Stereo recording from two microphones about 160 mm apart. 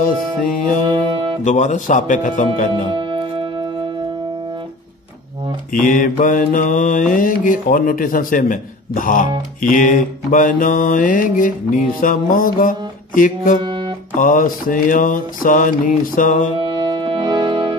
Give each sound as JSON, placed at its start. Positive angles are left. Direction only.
{"t": 0.8, "sound": "music", "side_deg": -30}
{"t": 1.4, "sound": "speech", "side_deg": 50}
{"t": 2.7, "sound": "music", "side_deg": -30}
{"t": 5.7, "sound": "mantra", "side_deg": 60}
{"t": 16.6, "sound": "music", "side_deg": -30}